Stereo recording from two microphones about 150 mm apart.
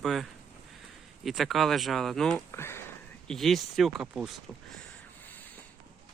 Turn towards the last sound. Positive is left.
turn(degrees=-5)  # may be behind; listen again after turning